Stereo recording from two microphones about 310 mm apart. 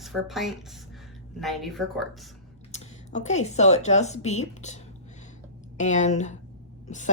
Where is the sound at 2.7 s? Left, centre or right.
Left.